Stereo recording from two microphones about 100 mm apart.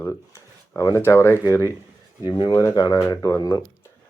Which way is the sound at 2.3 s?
50° left (ahead or behind).